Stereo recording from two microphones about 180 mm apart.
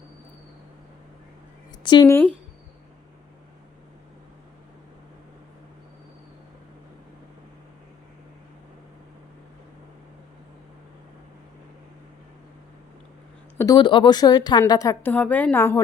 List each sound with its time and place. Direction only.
1.8 s a woman's voice: 25° left (ahead or behind)
13.6 s a woman's voice: 20° left (ahead or behind)